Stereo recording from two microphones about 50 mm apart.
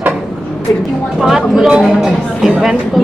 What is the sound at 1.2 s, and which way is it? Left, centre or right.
Speech, centre.